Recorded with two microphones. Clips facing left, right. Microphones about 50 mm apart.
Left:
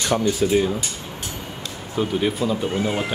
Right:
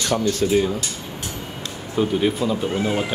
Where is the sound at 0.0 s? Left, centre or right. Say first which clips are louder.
Even; centre.